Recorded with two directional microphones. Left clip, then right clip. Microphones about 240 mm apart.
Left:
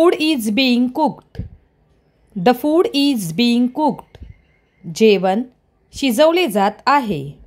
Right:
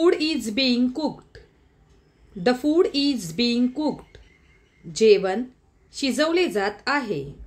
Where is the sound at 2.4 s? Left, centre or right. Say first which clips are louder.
Left 6 dB; left.